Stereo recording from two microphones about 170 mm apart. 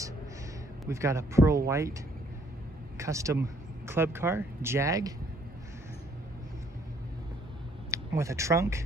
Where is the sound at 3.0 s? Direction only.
15° right (ahead or behind).